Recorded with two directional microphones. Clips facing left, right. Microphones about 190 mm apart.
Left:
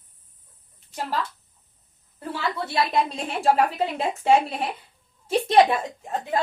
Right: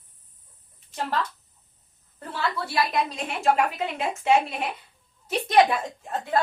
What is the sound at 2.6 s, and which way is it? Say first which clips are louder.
A woman's voice: left 3 dB; 25° left (ahead or behind).